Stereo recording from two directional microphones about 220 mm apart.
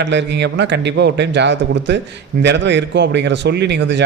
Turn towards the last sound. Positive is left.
turn(degrees=-50)  # may be behind; listen again after turning